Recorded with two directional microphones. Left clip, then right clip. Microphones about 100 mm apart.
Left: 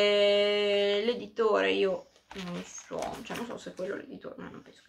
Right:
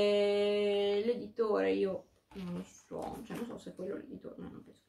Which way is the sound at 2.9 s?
20° left (ahead or behind).